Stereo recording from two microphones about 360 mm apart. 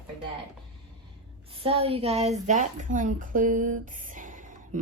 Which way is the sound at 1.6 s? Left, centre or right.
Centre.